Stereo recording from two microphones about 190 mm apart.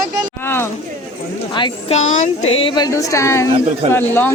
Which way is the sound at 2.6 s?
20° left (ahead or behind).